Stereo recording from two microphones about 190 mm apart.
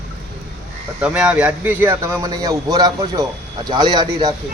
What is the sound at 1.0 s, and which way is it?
A man's voice, 5° right (ahead or behind).